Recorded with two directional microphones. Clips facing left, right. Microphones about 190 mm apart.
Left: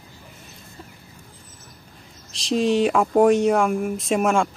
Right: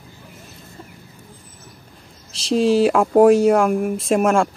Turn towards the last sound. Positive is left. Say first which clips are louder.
# right 3 dB
turn(degrees=0)  # may be behind; listen again after turning